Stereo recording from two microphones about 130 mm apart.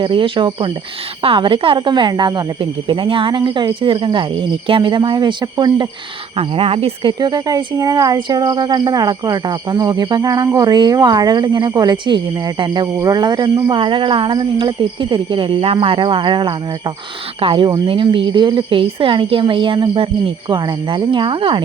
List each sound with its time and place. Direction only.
0.0 s speech: 40° right (ahead or behind)
6.3 s speech: 45° right (ahead or behind)